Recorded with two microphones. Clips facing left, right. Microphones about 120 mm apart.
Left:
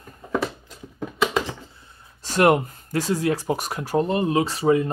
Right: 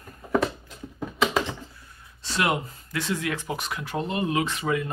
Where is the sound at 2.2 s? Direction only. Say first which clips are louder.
Left 8 dB; 50° left (ahead or behind); by 4.9 s 30° left (ahead or behind).